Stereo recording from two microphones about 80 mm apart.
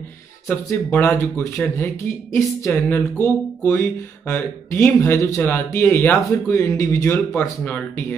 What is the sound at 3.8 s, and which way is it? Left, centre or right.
Speech, left.